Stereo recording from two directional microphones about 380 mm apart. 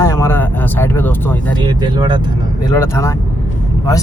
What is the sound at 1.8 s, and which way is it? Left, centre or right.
Speech, centre.